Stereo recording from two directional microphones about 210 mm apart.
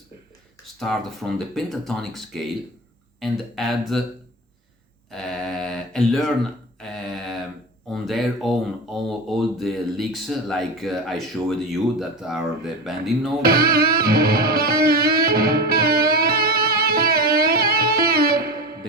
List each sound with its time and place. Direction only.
0.8 s speech: centre (ahead or behind)
5.1 s a sound: centre (ahead or behind)
7.9 s speech: centre (ahead or behind)
13.4 s music: 45° right (ahead or behind)